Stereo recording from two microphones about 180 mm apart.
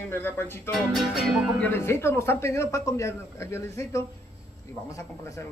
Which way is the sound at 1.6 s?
15° left (ahead or behind).